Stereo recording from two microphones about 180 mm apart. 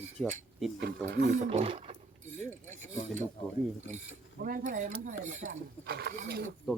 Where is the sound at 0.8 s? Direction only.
60° right (ahead or behind).